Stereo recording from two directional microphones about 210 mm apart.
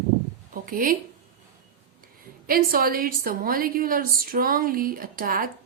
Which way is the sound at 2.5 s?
45° right (ahead or behind).